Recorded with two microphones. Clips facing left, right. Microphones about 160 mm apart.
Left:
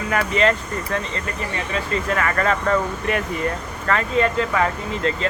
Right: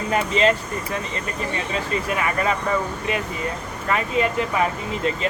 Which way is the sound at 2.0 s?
15° right (ahead or behind).